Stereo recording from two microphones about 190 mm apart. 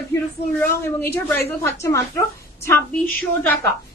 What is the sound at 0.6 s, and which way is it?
Speech, 10° left (ahead or behind).